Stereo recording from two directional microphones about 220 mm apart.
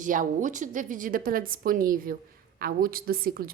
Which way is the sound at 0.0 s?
35° right (ahead or behind).